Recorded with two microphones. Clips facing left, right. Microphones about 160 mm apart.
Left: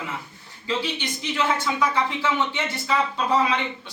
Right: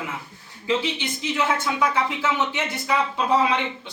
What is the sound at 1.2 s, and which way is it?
Speech, 15° right (ahead or behind).